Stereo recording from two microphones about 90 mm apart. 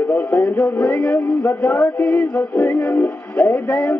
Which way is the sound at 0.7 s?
15° left (ahead or behind).